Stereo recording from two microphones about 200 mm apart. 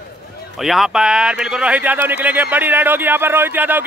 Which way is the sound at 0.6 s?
Centre (ahead or behind).